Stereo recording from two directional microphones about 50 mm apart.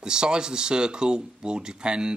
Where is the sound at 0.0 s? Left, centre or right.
Centre.